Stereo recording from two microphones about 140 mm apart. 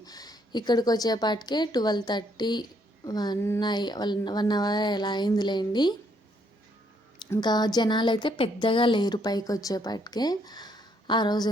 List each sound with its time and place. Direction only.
0.0 s a woman's voice: 25° left (ahead or behind)
7.4 s a woman's voice: 30° left (ahead or behind)